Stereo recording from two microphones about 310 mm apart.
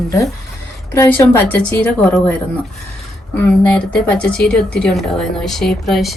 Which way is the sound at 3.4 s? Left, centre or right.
Centre.